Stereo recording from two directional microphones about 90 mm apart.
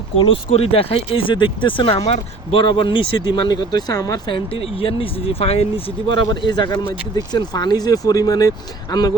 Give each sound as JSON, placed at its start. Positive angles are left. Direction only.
{"t": 0.2, "sound": "speech", "side_deg": 90}
{"t": 4.3, "sound": "speech", "side_deg": 80}
{"t": 6.5, "sound": "speech", "side_deg": 50}